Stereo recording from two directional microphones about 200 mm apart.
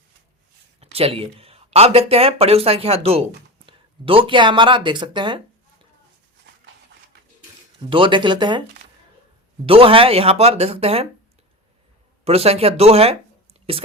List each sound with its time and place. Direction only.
0.8 s speech: 30° right (ahead or behind)
7.8 s speech: 25° right (ahead or behind)
9.6 s speech: 25° right (ahead or behind)
12.2 s speech: 30° right (ahead or behind)